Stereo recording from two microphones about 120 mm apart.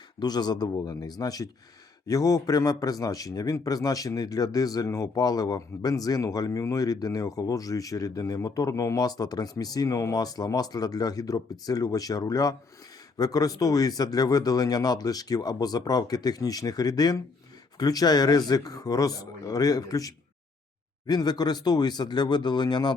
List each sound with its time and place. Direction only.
0.2 s a man's voice: 35° left (ahead or behind)